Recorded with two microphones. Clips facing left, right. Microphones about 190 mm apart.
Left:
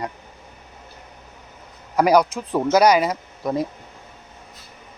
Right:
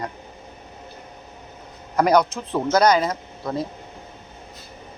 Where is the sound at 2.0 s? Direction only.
10° left (ahead or behind).